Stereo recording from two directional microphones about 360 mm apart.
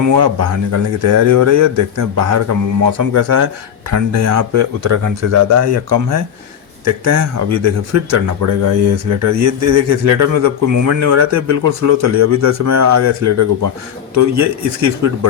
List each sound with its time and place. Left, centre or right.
0.0 s speech: right